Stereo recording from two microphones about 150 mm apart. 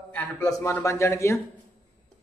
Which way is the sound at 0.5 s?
20° left (ahead or behind).